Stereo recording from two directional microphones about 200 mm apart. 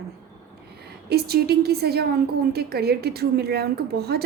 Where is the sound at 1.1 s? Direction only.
50° right (ahead or behind).